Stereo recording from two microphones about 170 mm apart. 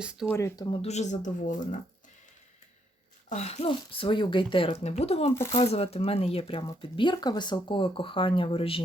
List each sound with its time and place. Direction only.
0.0 s speech: 5° right (ahead or behind)
0.3 s speech: 15° left (ahead or behind)
0.8 s speech: 40° left (ahead or behind)
3.2 s speech: 40° left (ahead or behind)